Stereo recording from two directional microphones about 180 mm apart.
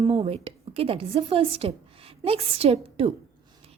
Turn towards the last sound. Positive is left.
turn(degrees=-35)  # may be behind; listen again after turning